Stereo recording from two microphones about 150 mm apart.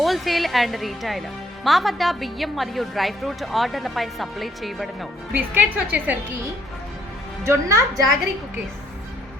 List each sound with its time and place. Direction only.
0.0 s a woman's voice: centre (ahead or behind)
5.3 s a woman's voice: 10° right (ahead or behind)
7.4 s a woman's voice: 20° right (ahead or behind)